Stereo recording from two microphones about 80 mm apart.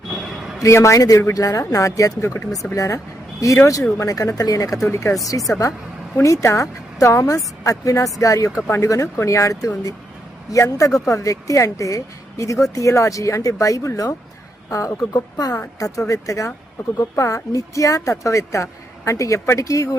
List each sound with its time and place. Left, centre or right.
0.6 s speech: left